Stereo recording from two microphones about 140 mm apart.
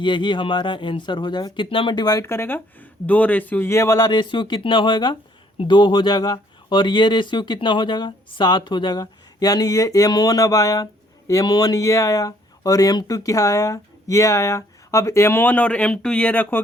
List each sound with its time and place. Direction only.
0.0 s speech: 35° left (ahead or behind); by 16.6 s 10° left (ahead or behind)